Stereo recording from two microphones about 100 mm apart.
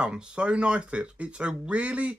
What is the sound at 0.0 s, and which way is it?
Speech, 10° right (ahead or behind).